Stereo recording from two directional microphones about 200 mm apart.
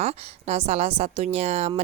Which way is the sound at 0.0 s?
30° right (ahead or behind).